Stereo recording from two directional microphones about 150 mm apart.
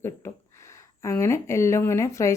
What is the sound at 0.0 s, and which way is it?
A woman's voice, 20° left (ahead or behind).